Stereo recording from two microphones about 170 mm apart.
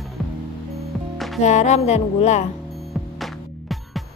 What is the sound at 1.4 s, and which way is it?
Music, 40° left (ahead or behind).